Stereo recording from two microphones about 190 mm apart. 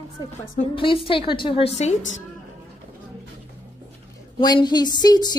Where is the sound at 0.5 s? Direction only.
25° left (ahead or behind).